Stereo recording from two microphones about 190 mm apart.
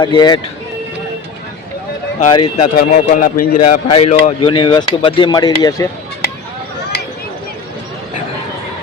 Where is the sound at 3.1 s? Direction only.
45° left (ahead or behind).